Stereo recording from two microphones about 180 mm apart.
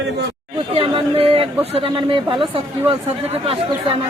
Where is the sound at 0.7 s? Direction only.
30° right (ahead or behind).